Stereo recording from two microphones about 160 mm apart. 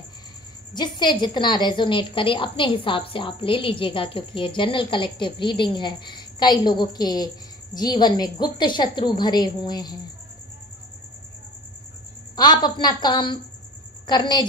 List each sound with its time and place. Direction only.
0.7 s a woman's voice: 25° left (ahead or behind)
12.4 s a woman's voice: 25° left (ahead or behind)